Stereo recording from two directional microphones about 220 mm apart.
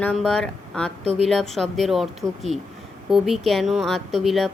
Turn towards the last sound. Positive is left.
turn(degrees=0)  # may be behind; listen again after turning